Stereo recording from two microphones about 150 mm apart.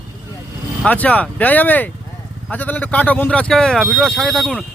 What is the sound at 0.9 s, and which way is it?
Speech, 10° left (ahead or behind).